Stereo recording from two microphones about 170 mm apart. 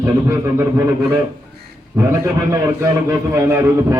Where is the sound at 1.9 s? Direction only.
15° right (ahead or behind).